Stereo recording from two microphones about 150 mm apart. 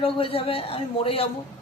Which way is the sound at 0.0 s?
40° left (ahead or behind).